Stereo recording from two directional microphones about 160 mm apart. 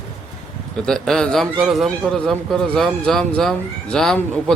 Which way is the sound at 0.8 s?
5° left (ahead or behind).